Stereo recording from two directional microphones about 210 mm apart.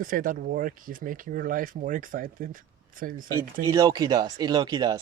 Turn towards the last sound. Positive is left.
turn(degrees=-20)  # may be behind; listen again after turning